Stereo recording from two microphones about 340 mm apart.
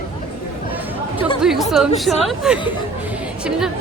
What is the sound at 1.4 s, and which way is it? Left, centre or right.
Speech, centre.